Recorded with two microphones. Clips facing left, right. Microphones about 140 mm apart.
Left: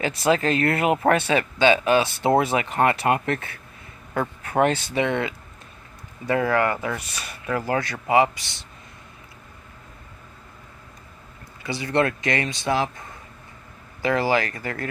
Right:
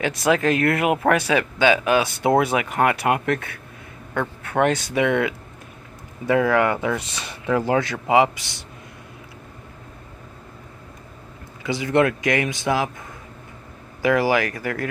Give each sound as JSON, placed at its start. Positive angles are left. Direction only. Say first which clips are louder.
{"t": 0.0, "sound": "speech", "louder": "right 1 dB", "side_deg": -5}
{"t": 4.9, "sound": "speech", "louder": "right 3 dB", "side_deg": -10}
{"t": 11.6, "sound": "speech", "louder": "right 3 dB", "side_deg": -15}
{"t": 14.0, "sound": "speech", "louder": "right 3 dB", "side_deg": -10}